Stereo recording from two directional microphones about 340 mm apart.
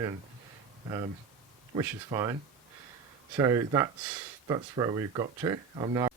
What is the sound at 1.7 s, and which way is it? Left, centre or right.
Speech, centre.